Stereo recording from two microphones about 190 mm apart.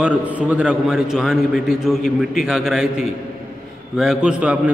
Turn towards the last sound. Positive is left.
turn(degrees=-5)  # may be behind; listen again after turning